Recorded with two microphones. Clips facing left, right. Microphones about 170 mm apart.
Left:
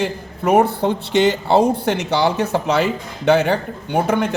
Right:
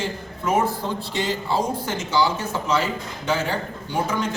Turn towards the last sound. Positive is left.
turn(degrees=65)  # may be behind; listen again after turning